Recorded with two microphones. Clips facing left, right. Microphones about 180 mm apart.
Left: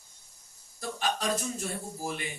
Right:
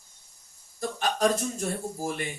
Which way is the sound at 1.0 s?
45° right (ahead or behind).